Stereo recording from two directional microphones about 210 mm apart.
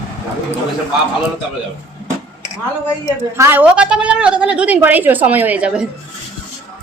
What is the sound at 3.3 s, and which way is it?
A woman's voice, 10° right (ahead or behind).